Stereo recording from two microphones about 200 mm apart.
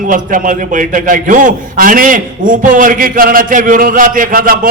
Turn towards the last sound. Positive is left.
turn(degrees=-45)  # may be behind; listen again after turning